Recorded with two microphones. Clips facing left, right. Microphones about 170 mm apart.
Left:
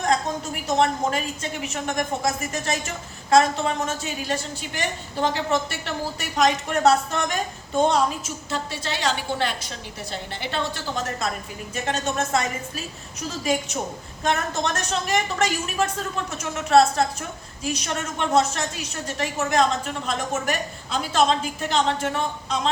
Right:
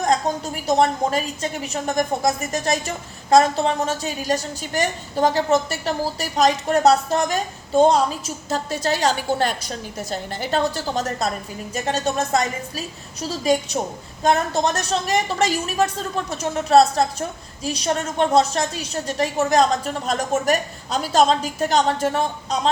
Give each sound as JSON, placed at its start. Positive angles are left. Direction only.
{"t": 0.5, "sound": "a woman's voice", "side_deg": -35}